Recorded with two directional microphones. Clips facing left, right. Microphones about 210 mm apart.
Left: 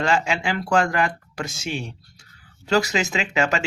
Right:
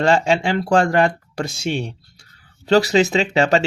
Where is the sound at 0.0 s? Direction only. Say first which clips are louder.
Right 6 dB; 35° right (ahead or behind).